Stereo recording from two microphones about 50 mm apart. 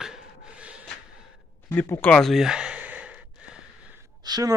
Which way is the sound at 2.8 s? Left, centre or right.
Right.